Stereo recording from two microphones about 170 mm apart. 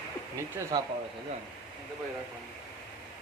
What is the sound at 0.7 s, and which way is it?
Speech, 25° right (ahead or behind).